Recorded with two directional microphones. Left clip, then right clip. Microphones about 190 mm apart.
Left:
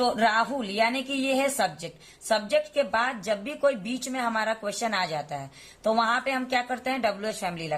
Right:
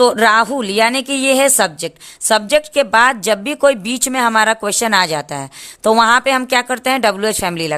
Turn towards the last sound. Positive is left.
turn(degrees=-60)  # may be behind; listen again after turning